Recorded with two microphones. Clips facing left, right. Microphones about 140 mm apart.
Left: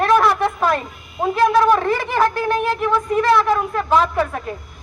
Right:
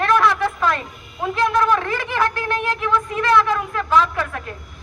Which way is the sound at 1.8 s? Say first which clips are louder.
Left 4 dB; 45° left (ahead or behind).